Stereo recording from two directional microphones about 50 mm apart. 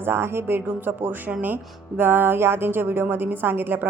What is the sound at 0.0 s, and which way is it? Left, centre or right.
A woman's voice, right.